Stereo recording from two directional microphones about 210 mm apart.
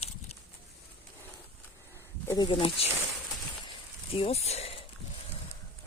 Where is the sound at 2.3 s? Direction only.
20° left (ahead or behind).